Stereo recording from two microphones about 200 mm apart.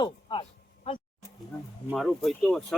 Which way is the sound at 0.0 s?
25° left (ahead or behind).